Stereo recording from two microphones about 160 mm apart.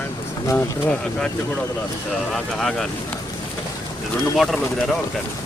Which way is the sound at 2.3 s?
Centre (ahead or behind).